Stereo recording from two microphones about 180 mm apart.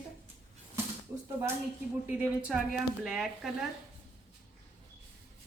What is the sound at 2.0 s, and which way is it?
Speech, 5° right (ahead or behind).